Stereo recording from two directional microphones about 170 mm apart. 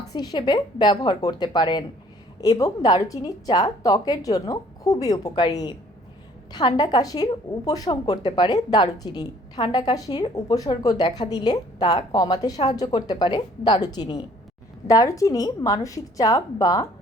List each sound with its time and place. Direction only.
0.0 s a woman's voice: 20° left (ahead or behind)